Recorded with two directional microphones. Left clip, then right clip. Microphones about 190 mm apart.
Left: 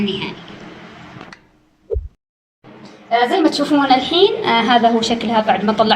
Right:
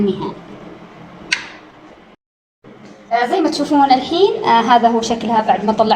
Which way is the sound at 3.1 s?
Centre (ahead or behind).